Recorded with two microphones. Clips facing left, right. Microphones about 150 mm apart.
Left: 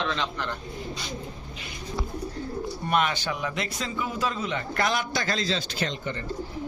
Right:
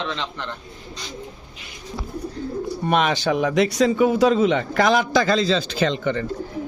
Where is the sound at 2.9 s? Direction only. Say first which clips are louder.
Right 6 dB; 90° right.